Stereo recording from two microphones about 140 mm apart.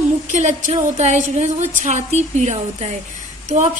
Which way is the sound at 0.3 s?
55° right (ahead or behind).